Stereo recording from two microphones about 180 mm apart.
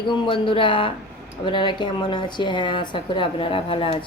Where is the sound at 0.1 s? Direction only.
25° left (ahead or behind).